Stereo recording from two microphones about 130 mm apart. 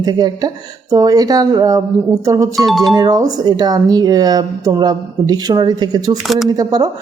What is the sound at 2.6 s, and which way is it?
Speech, centre (ahead or behind).